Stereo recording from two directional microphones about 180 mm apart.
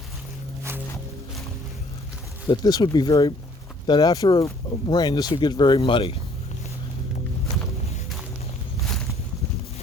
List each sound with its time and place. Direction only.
2.5 s speech: 25° left (ahead or behind)